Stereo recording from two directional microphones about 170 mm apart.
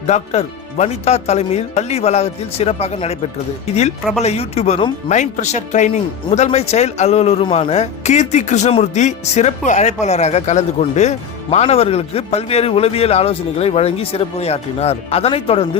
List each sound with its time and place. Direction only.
0.1 s speech: 40° left (ahead or behind)
4.2 s speech: 40° left (ahead or behind)